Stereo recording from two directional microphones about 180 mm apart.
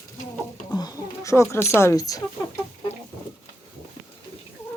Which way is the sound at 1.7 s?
15° left (ahead or behind).